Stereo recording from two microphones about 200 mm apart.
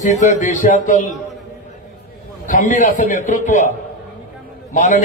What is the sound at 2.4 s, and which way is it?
A man's voice, 40° left (ahead or behind).